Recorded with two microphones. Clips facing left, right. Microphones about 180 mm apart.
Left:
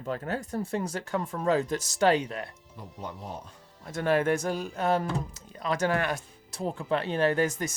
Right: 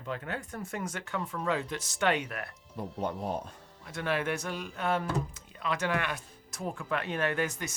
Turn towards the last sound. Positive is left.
turn(degrees=45)  # may be behind; listen again after turning